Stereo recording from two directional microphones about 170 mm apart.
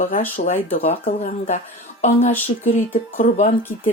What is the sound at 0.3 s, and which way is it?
Speech, 40° left (ahead or behind).